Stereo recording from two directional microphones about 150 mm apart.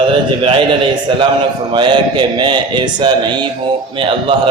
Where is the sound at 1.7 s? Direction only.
30° right (ahead or behind).